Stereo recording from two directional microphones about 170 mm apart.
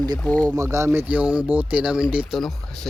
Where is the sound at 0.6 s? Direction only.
20° right (ahead or behind); by 2.9 s centre (ahead or behind).